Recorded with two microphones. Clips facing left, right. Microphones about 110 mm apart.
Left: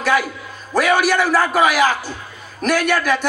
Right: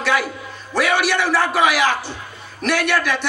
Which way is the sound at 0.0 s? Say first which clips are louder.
Left 2 dB; 45° left (ahead or behind).